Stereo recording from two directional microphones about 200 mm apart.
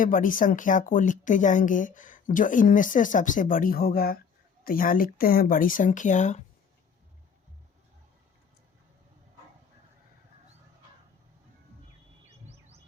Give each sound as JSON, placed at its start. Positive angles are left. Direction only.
{"t": 0.0, "sound": "speech", "side_deg": 40}